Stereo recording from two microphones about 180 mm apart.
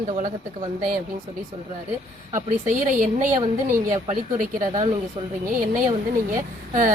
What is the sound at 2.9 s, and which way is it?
Speech, 50° right (ahead or behind).